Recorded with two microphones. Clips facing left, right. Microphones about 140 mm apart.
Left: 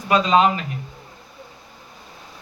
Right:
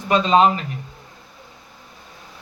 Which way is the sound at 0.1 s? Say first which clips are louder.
Right 1 dB; 35° right (ahead or behind).